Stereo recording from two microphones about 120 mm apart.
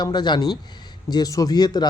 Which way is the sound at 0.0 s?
35° left (ahead or behind).